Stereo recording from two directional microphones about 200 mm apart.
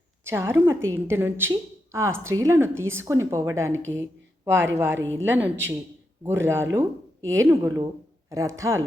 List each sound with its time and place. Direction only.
0.3 s a woman's voice: 10° right (ahead or behind)